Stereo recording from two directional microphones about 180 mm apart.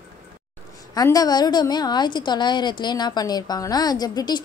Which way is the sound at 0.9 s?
20° left (ahead or behind).